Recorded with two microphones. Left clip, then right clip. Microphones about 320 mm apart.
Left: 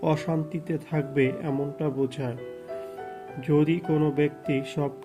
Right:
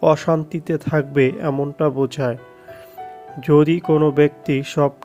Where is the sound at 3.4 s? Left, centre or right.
Right.